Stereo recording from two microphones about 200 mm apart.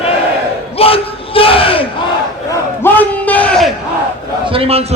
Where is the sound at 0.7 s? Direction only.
30° left (ahead or behind).